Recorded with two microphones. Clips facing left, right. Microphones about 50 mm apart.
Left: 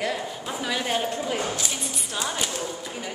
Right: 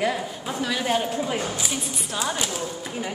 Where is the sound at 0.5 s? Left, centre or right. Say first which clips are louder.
Right 3 dB; centre.